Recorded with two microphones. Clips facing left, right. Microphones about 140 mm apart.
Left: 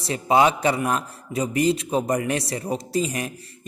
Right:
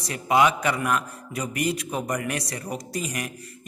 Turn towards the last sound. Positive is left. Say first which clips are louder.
# left 6 dB
turn(degrees=25)  # may be behind; listen again after turning